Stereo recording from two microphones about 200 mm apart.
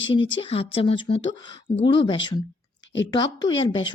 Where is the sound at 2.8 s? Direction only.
65° left (ahead or behind).